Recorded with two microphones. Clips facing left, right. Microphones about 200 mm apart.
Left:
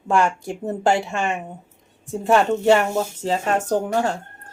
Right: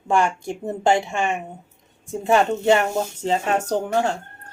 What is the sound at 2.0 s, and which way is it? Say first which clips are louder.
Speech: left 1 dB; centre (ahead or behind).